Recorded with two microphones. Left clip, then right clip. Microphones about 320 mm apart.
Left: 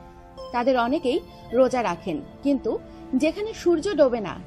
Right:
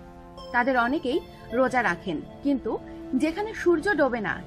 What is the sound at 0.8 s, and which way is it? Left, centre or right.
A woman's voice, centre.